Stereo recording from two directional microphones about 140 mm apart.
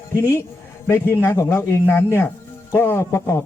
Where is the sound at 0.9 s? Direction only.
20° left (ahead or behind).